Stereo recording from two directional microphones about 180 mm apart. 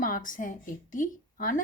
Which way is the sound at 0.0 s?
45° left (ahead or behind).